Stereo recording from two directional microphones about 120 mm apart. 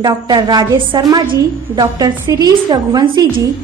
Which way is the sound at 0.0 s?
35° right (ahead or behind).